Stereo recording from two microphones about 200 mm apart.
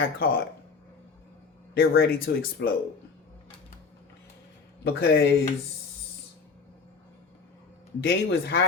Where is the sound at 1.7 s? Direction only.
50° left (ahead or behind).